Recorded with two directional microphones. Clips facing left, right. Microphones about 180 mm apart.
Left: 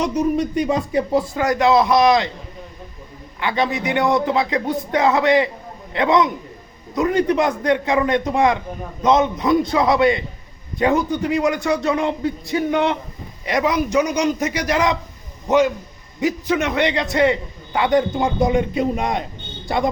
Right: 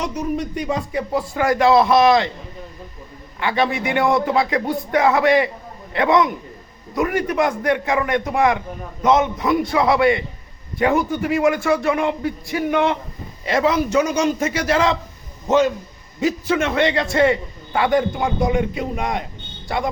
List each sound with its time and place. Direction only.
0.0 s speech: 20° left (ahead or behind)
3.4 s a man's voice: 20° left (ahead or behind)